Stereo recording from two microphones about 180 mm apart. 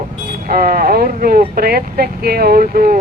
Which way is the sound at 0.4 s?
55° right (ahead or behind).